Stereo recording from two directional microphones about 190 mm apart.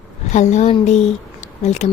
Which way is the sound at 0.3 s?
40° left (ahead or behind).